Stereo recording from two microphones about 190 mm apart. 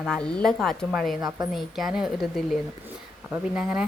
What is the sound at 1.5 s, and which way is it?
A woman's voice, centre (ahead or behind).